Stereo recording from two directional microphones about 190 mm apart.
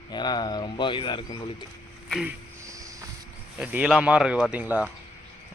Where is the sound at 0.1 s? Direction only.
20° left (ahead or behind).